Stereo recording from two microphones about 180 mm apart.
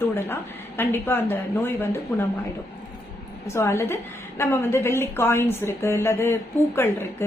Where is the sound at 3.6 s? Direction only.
15° left (ahead or behind).